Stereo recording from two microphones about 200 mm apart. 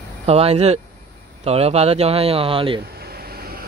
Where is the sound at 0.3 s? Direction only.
30° right (ahead or behind).